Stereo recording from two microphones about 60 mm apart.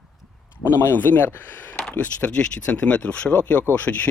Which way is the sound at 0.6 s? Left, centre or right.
Left.